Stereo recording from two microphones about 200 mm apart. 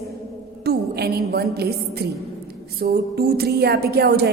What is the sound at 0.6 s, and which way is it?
A woman's voice, 55° right (ahead or behind).